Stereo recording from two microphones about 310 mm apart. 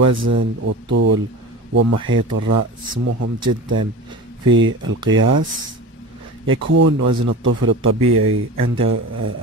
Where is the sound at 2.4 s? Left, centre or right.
Right.